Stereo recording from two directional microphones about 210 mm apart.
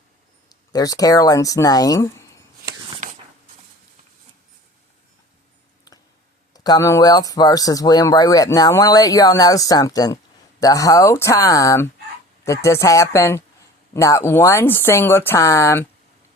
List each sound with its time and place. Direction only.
0.7 s speech: 15° left (ahead or behind)
6.5 s speech: 20° left (ahead or behind)